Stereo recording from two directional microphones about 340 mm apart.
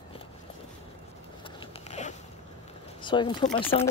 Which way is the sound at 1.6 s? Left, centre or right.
Centre.